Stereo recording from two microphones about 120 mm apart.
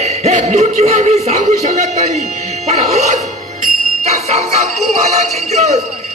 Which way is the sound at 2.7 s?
65° right (ahead or behind).